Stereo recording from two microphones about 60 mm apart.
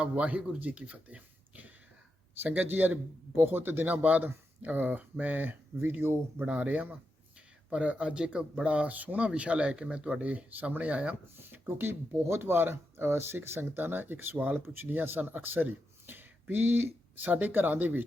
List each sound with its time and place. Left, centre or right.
0.0 s speech: right
2.4 s speech: right
6.5 s speech: right
11.3 s speech: right